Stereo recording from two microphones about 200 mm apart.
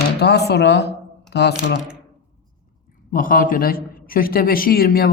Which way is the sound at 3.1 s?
45° left (ahead or behind).